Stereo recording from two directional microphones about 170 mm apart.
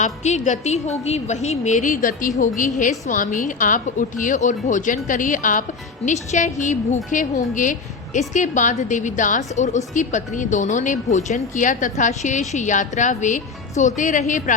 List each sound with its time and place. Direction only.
0.0 s a woman's voice: 45° left (ahead or behind)